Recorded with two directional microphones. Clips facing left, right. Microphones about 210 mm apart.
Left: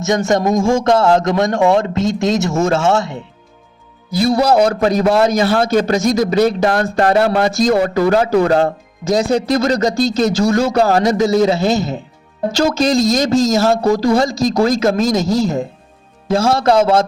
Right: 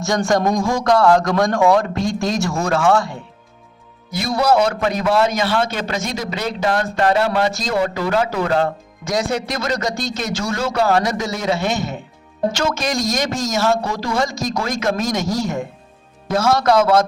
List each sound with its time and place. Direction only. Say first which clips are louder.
0.0 s speech: left 3 dB; 20° left (ahead or behind)
4.1 s a man's voice: left 4 dB; 35° left (ahead or behind)